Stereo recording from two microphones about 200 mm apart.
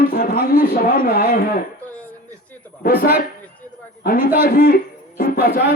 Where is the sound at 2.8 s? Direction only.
45° left (ahead or behind).